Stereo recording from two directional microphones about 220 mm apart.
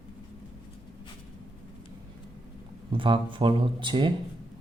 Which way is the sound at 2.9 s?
25° right (ahead or behind).